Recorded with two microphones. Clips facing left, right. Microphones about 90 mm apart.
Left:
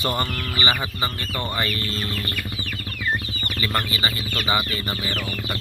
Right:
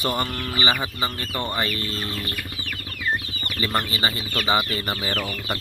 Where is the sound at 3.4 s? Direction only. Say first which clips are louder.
Even; 25° right (ahead or behind).